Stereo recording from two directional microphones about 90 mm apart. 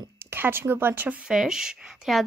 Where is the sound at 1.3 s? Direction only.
5° right (ahead or behind).